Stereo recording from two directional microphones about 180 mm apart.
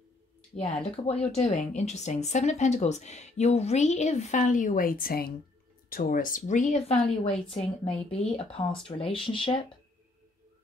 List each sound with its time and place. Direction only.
0.6 s speech: 35° left (ahead or behind)